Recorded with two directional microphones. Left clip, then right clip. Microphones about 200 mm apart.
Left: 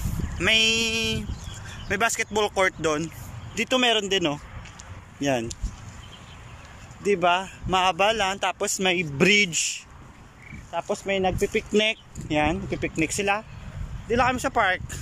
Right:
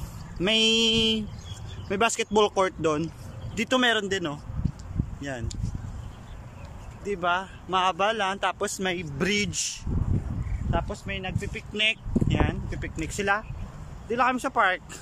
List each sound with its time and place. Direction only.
0.4 s speech: 15° right (ahead or behind)
3.5 s speech: centre (ahead or behind)
4.6 s a sound: 20° right (ahead or behind)
5.2 s speech: 15° left (ahead or behind)
7.0 s speech: 5° left (ahead or behind)
10.9 s speech: 25° left (ahead or behind); by 15.0 s centre (ahead or behind)